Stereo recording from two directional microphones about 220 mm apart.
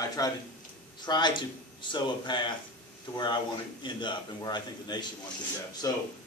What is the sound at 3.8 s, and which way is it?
A man's voice, 20° left (ahead or behind).